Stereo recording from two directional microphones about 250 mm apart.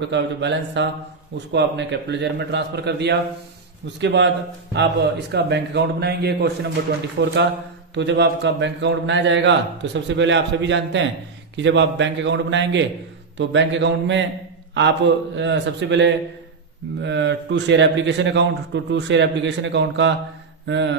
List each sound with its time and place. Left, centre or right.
0.1 s a man's voice: right
20.6 s mantra: right